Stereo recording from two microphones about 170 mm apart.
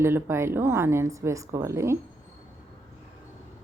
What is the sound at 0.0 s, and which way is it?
A woman's voice, 15° right (ahead or behind).